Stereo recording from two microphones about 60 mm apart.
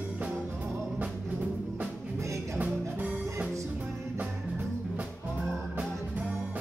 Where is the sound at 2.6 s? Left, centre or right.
Right.